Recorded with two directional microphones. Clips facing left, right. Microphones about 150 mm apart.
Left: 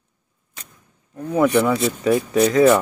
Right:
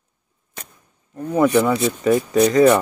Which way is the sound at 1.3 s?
Centre (ahead or behind).